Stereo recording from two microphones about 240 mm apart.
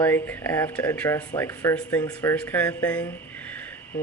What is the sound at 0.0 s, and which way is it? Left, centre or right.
Speech, centre.